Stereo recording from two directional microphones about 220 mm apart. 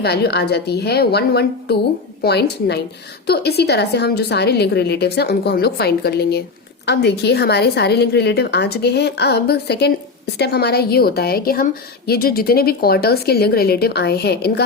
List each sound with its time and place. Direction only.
0.0 s a woman's voice: 50° left (ahead or behind)